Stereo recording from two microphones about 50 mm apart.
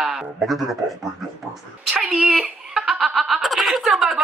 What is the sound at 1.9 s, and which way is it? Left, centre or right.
Speech, centre.